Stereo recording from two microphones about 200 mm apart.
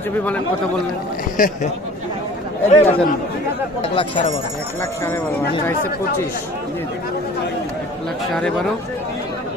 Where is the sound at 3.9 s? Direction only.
25° left (ahead or behind).